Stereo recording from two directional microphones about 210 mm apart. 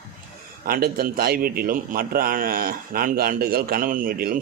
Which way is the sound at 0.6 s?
45° right (ahead or behind).